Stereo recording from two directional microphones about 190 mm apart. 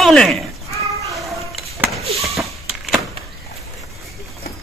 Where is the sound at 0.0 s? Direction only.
Centre (ahead or behind).